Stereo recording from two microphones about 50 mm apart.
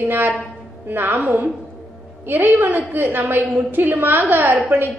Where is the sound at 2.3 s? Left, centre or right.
Right.